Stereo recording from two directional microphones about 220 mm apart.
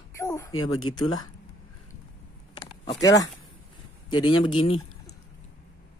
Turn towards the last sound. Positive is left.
turn(degrees=25)  # may be behind; listen again after turning